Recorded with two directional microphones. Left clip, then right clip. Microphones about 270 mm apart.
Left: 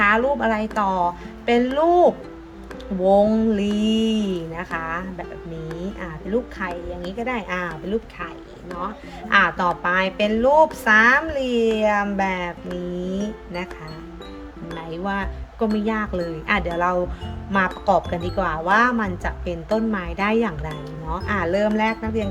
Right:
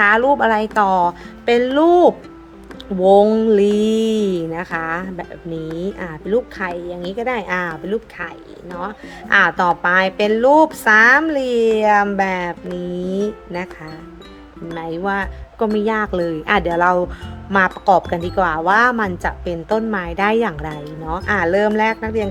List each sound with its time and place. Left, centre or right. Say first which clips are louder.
0.0 s speech: right 5 dB; centre
9.3 s speech: right 4 dB; centre
14.8 s speech: right 6 dB; centre